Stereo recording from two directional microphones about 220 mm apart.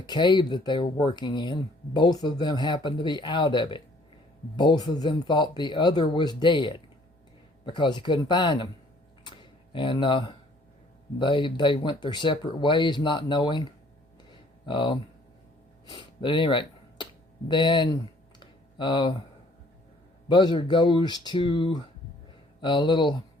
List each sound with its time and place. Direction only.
0.0 s speech: 20° left (ahead or behind)
9.2 s a sound: 20° left (ahead or behind)
11.2 s speech: 20° left (ahead or behind)
15.9 s a sound: 20° left (ahead or behind)
17.5 s speech: 20° left (ahead or behind)
18.3 s typing: 20° left (ahead or behind)
20.2 s speech: 20° left (ahead or behind)